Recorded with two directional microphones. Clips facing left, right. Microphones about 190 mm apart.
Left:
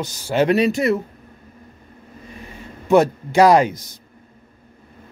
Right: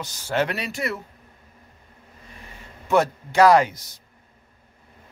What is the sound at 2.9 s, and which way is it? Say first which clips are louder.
Speech: left 6 dB; 15° left (ahead or behind).